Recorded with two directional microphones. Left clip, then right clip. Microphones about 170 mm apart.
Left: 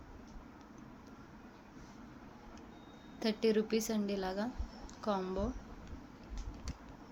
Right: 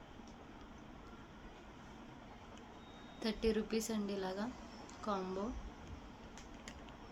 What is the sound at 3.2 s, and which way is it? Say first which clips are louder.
A woman's voice: left 5 dB; 40° left (ahead or behind).